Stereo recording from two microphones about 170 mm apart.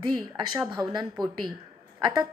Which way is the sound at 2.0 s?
25° right (ahead or behind).